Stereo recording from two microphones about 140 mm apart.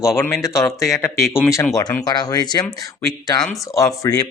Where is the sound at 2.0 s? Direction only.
30° left (ahead or behind).